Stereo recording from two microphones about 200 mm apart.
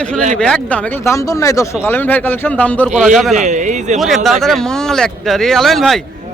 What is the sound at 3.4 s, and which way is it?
Speech, 35° right (ahead or behind).